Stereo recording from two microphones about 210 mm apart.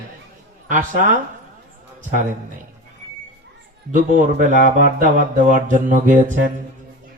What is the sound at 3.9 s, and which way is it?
Speech, 35° right (ahead or behind).